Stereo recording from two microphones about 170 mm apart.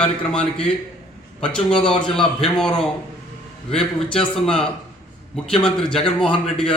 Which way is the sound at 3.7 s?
5° left (ahead or behind).